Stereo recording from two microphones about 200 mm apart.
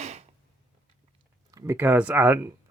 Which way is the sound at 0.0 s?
35° right (ahead or behind).